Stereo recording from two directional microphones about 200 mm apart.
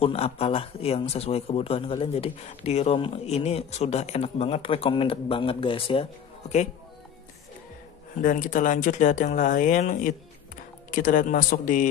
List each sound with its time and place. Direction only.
0.0 s a man's voice: 30° left (ahead or behind)
8.2 s speech: 40° left (ahead or behind)